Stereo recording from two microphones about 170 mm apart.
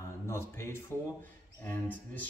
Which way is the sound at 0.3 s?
15° left (ahead or behind).